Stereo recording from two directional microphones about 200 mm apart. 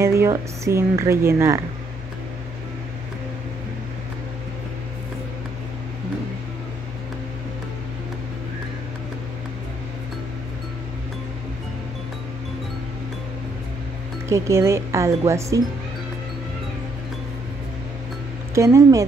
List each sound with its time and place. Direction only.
0.0 s speech: 15° right (ahead or behind)
14.3 s speech: 15° right (ahead or behind)
18.5 s speech: 15° right (ahead or behind)